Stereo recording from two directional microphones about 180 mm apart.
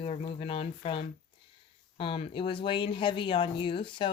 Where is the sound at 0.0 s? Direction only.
35° left (ahead or behind).